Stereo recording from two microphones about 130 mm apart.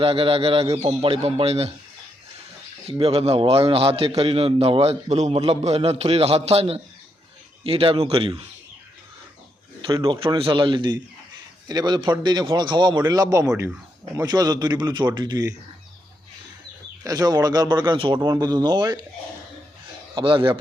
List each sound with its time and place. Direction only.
0.0 s a man's voice: 45° right (ahead or behind)
0.6 s a man's voice: 25° right (ahead or behind)
0.9 s a man's voice: 45° right (ahead or behind)
3.0 s a man's voice: 50° right (ahead or behind)
9.8 s speech: 35° right (ahead or behind)
17.0 s speech: 30° right (ahead or behind)
20.1 s speech: 40° right (ahead or behind)